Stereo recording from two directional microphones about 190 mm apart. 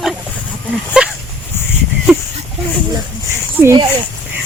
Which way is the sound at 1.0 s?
5° right (ahead or behind).